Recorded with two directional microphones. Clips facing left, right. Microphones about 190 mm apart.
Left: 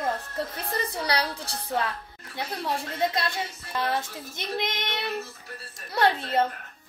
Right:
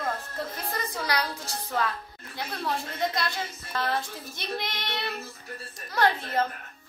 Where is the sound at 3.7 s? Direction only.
20° left (ahead or behind).